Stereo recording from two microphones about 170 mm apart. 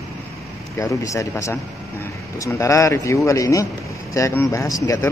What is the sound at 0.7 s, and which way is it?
A man's voice, 15° left (ahead or behind).